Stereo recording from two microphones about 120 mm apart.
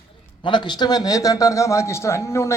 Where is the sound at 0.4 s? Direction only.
40° left (ahead or behind).